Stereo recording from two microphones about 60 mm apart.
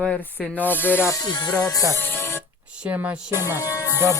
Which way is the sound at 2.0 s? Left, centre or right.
Left.